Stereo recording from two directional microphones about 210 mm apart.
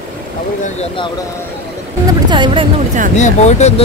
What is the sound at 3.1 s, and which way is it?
Speech, 35° left (ahead or behind).